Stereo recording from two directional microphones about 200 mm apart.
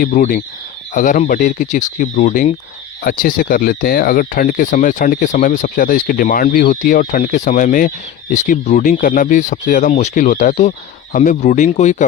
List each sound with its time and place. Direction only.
0.0 s speech: 40° left (ahead or behind)